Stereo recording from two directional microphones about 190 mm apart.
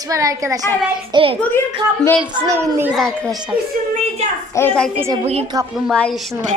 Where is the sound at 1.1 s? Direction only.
30° right (ahead or behind).